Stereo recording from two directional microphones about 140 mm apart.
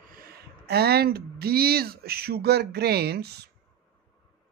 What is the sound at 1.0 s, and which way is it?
Speech, 90° right.